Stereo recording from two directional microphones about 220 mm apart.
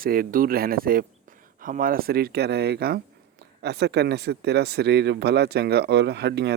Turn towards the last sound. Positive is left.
turn(degrees=-50)  # may be behind; listen again after turning